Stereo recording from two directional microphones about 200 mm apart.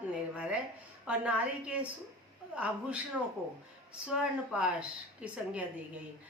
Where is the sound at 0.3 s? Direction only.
5° right (ahead or behind).